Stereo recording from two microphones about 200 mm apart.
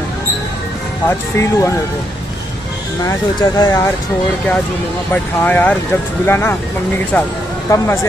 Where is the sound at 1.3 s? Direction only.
15° left (ahead or behind).